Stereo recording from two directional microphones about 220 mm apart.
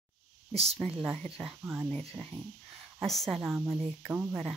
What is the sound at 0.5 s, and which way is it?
Speech, 30° right (ahead or behind).